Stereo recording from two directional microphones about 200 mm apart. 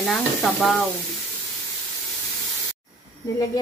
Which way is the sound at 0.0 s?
Centre (ahead or behind).